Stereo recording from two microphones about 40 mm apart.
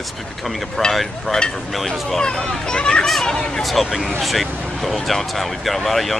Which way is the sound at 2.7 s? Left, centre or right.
Left.